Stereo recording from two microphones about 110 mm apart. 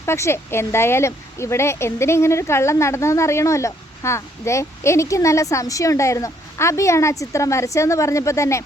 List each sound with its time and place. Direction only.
0.0 s speech: 25° left (ahead or behind)